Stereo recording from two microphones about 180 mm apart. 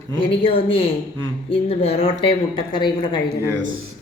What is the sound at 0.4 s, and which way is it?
A woman's voice, 30° left (ahead or behind).